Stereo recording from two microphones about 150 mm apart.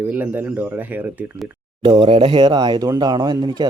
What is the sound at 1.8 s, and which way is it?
Speech, 30° right (ahead or behind).